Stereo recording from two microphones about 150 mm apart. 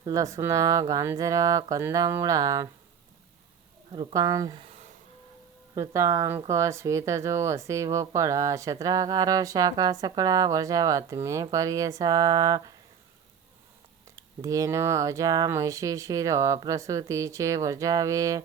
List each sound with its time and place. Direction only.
0.0 s speech: 20° right (ahead or behind)
4.1 s speech: 20° right (ahead or behind)
4.5 s a sound: 40° right (ahead or behind)
5.7 s speech: 20° right (ahead or behind)
14.2 s speech: 20° right (ahead or behind)